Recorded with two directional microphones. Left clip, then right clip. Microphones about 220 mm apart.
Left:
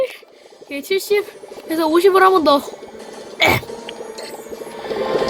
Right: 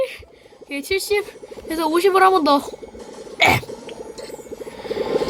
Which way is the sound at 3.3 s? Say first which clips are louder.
Even; 5° left (ahead or behind).